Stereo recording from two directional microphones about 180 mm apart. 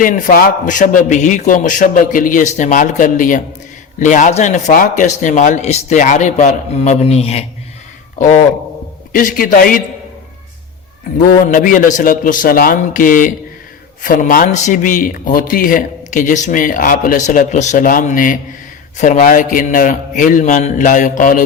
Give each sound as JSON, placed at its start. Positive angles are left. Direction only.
{"t": 0.0, "sound": "a man's voice", "side_deg": 50}
{"t": 9.1, "sound": "a man's voice", "side_deg": 50}
{"t": 11.4, "sound": "a man's voice", "side_deg": 45}